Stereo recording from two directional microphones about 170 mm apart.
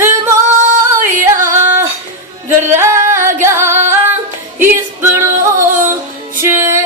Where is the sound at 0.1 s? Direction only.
45° right (ahead or behind).